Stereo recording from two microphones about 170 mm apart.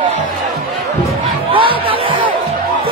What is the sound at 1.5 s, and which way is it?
Music, 30° right (ahead or behind).